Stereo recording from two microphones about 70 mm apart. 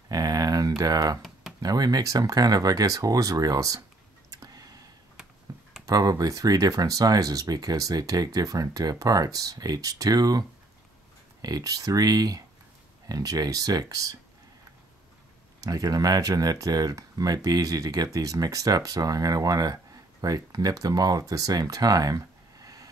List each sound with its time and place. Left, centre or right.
0.1 s a sound: right
1.6 s speech: right
4.3 s a sound: right
5.5 s computer keyboard: right
5.9 s speech: right
11.4 s speech: right
15.6 s speech: right